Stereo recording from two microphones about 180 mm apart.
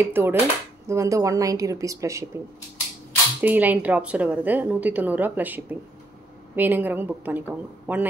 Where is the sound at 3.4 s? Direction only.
10° right (ahead or behind).